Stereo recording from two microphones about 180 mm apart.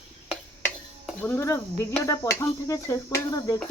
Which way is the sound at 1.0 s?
10° left (ahead or behind).